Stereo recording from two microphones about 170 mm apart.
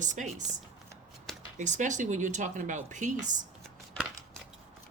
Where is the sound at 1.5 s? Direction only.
45° right (ahead or behind).